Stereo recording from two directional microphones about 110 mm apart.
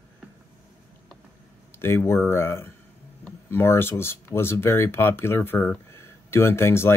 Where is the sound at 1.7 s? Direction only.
25° left (ahead or behind).